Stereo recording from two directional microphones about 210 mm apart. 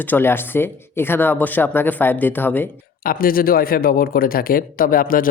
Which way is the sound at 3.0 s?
45° left (ahead or behind).